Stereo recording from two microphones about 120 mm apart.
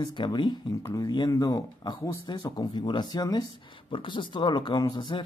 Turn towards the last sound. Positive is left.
turn(degrees=40)  # may be behind; listen again after turning